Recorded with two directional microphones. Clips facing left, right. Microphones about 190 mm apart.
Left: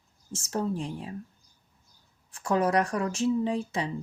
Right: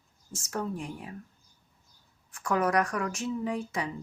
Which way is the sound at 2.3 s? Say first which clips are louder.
Left 2 dB; 30° left (ahead or behind).